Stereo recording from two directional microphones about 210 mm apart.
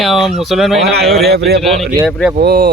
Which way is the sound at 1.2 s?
50° right (ahead or behind).